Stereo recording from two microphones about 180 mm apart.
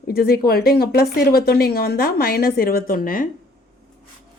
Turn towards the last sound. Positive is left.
turn(degrees=50)  # may be behind; listen again after turning